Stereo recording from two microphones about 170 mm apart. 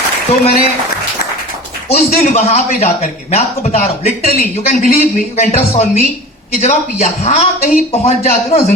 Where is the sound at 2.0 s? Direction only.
45° left (ahead or behind).